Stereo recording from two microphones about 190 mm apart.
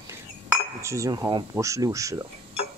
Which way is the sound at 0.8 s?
15° right (ahead or behind).